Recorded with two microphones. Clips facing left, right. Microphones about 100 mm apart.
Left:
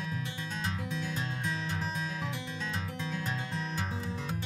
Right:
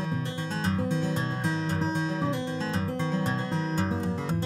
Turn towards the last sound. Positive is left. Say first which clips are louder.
# right 8 dB
turn(degrees=-35)  # may be behind; listen again after turning